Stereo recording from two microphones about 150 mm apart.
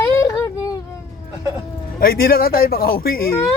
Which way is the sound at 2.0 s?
80° left.